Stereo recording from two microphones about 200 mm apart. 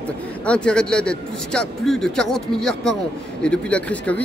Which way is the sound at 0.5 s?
5° left (ahead or behind).